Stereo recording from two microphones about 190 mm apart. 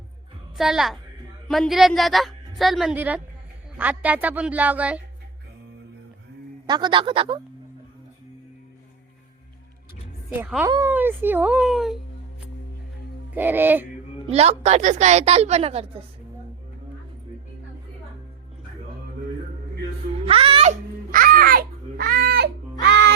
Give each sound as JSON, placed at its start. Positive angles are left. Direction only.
{"t": 0.5, "sound": "a woman's voice", "side_deg": 0}
{"t": 6.7, "sound": "speech", "side_deg": -20}
{"t": 10.2, "sound": "a woman's voice", "side_deg": -5}
{"t": 13.3, "sound": "a woman's voice", "side_deg": -10}
{"t": 14.3, "sound": "a woman's voice", "side_deg": -35}
{"t": 20.2, "sound": "music", "side_deg": -30}
{"t": 21.1, "sound": "babbling", "side_deg": -50}
{"t": 22.8, "sound": "music", "side_deg": -70}